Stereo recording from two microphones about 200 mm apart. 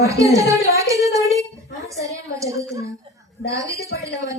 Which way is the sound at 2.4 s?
15° right (ahead or behind).